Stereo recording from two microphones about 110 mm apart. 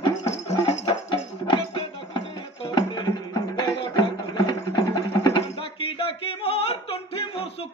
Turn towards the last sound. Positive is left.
turn(degrees=60)  # may be behind; listen again after turning